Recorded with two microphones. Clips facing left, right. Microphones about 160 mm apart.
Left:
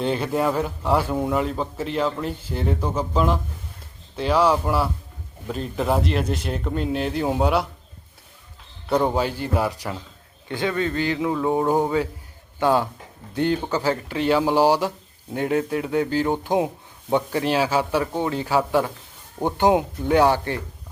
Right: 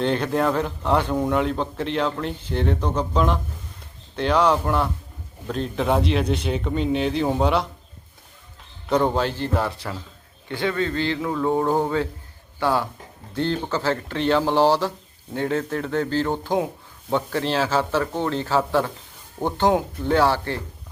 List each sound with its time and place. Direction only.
0.0 s a man's voice: 5° left (ahead or behind)
8.9 s speech: 5° left (ahead or behind)